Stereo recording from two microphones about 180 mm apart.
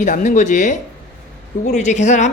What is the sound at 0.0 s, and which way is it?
A woman's voice, 45° left (ahead or behind).